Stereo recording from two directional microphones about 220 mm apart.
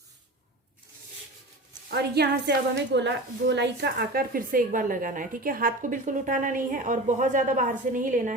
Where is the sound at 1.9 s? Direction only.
50° right (ahead or behind).